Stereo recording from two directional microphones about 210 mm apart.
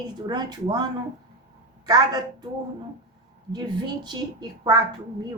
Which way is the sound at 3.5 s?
20° right (ahead or behind).